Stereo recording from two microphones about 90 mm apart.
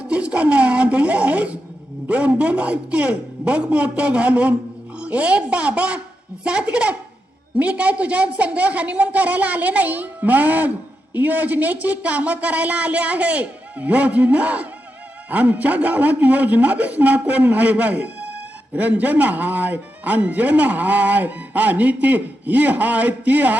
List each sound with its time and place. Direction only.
0.0 s speech: 10° right (ahead or behind)